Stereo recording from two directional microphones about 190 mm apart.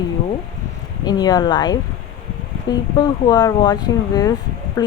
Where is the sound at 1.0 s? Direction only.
20° left (ahead or behind).